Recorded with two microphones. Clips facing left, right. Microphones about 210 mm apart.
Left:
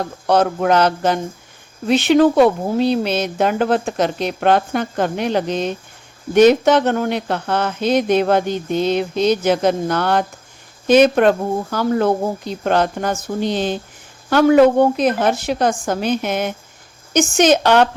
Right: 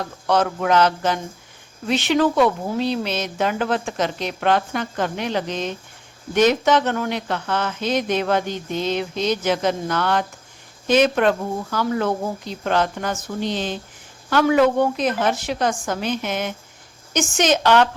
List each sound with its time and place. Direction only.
0.3 s a sound: 40° left (ahead or behind)
1.9 s a woman's voice: 55° left (ahead or behind)
2.3 s a sound: 30° left (ahead or behind)
2.7 s a woman's voice: 50° left (ahead or behind)
9.6 s a woman's voice: 45° left (ahead or behind)
14.9 s a woman's voice: 55° left (ahead or behind)
17.2 s speech: 60° left (ahead or behind)